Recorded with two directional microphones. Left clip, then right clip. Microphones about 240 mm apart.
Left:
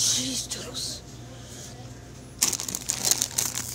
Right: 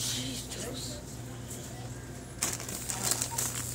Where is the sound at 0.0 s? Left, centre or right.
Left.